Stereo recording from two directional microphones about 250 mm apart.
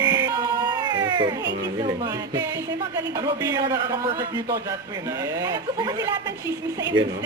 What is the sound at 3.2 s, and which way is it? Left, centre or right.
Speech, centre.